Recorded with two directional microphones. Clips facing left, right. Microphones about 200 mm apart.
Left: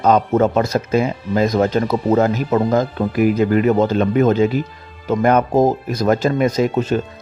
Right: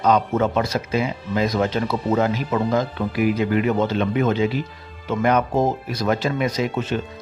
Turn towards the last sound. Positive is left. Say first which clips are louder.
# left 6 dB
turn(degrees=40)  # may be behind; listen again after turning